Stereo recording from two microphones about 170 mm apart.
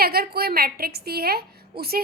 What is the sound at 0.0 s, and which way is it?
A woman's voice, 65° right (ahead or behind).